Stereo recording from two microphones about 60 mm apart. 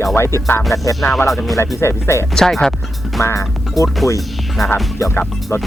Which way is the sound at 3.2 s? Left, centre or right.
Left.